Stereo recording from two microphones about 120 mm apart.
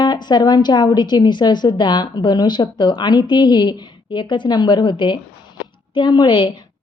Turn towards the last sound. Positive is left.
turn(degrees=40)  # may be behind; listen again after turning